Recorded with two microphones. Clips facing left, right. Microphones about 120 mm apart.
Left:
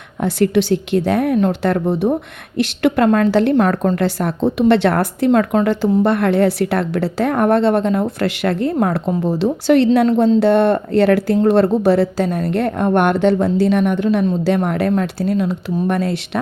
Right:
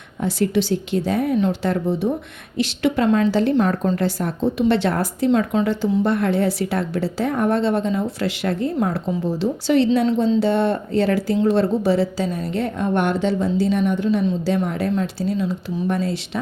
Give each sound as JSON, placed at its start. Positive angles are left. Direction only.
{"t": 0.2, "sound": "a woman's voice", "side_deg": 65}